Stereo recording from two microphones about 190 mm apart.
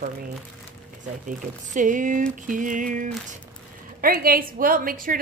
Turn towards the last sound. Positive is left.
turn(degrees=-50)  # may be behind; listen again after turning